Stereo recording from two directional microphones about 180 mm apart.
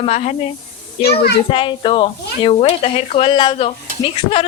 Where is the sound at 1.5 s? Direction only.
30° left (ahead or behind).